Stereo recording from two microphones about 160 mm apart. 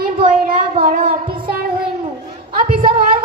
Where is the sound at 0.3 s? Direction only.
60° right (ahead or behind).